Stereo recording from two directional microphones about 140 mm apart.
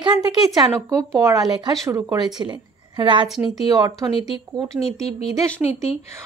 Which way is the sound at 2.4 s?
35° right (ahead or behind).